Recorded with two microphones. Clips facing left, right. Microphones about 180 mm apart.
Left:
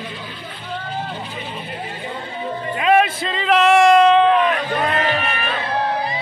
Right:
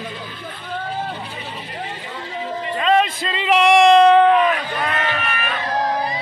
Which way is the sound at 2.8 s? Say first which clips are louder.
Left 2 dB; 10° left (ahead or behind).